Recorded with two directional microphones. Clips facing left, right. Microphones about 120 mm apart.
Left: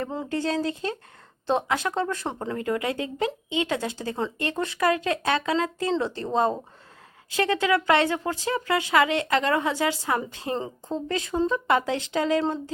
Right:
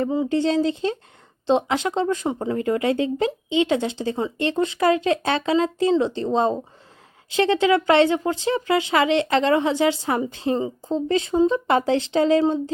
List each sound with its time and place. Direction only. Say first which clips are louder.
0.3 s speech: right 6 dB; 25° right (ahead or behind)
2.6 s speech: right 6 dB; 25° right (ahead or behind)